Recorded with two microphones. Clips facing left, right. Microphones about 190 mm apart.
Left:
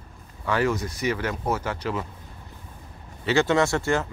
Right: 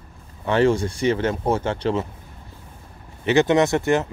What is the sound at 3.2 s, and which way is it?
Speech, 20° right (ahead or behind).